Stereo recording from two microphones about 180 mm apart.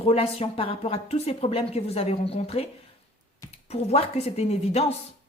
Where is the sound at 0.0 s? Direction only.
35° left (ahead or behind).